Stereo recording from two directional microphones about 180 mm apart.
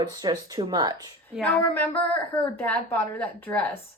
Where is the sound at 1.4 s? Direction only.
10° left (ahead or behind).